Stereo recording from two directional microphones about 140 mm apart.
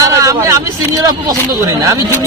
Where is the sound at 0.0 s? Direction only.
25° right (ahead or behind).